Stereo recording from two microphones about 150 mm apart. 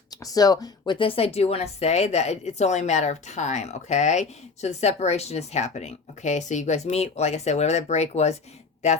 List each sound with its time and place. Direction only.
0.1 s speech: 25° left (ahead or behind); by 8.4 s 45° left (ahead or behind)